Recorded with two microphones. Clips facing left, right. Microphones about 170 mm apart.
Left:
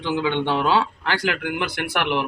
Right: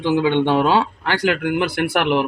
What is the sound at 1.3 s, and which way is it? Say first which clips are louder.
Speech: right 6 dB; 35° right (ahead or behind).